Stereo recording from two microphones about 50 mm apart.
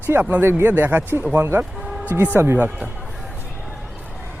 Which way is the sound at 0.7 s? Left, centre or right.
Right.